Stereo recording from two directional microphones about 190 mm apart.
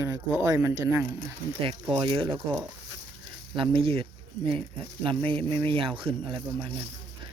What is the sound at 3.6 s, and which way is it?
Speech, 30° right (ahead or behind).